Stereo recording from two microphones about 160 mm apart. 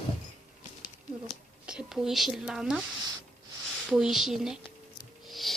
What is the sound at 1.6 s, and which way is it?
Speech, 5° right (ahead or behind).